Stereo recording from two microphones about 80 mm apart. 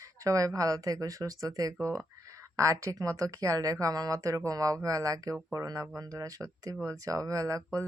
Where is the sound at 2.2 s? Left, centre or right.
Right.